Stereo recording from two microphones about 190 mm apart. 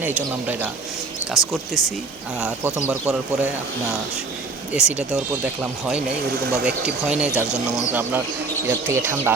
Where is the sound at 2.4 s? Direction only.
5° right (ahead or behind).